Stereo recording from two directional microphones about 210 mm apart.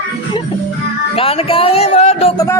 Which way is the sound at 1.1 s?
25° left (ahead or behind).